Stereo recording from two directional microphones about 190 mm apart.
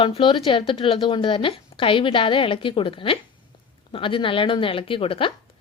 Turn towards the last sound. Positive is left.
turn(degrees=30)  # may be behind; listen again after turning